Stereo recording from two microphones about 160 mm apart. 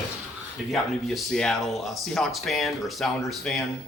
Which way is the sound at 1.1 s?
5° left (ahead or behind).